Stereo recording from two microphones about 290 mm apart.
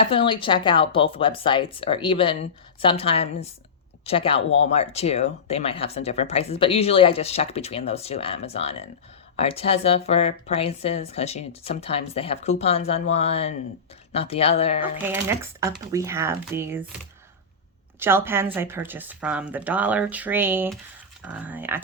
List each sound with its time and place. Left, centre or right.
0.0 s speech: centre
15.0 s speech: centre
18.0 s speech: centre